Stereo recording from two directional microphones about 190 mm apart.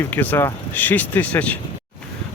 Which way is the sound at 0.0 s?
10° left (ahead or behind).